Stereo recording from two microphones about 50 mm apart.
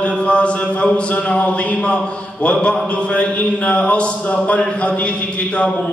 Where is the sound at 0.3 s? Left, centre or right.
Left.